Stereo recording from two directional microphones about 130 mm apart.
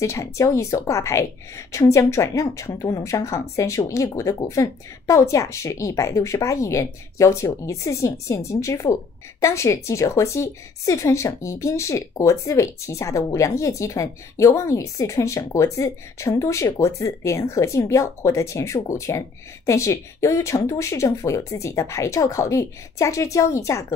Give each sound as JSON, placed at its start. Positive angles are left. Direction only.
{"t": 0.0, "sound": "speech", "side_deg": 25}